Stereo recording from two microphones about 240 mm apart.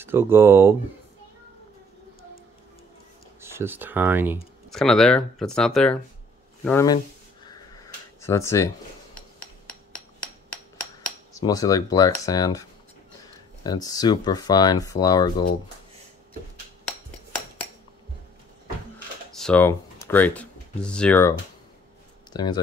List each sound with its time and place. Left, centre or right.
0.0 s speech: centre
3.3 s speech: centre
4.6 s speech: centre
8.2 s speech: centre
9.1 s a sound: centre
11.4 s speech: centre
13.7 s speech: centre
19.3 s speech: centre